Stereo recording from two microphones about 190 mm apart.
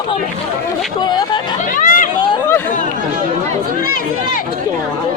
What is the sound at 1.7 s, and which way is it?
Speech, 45° left (ahead or behind).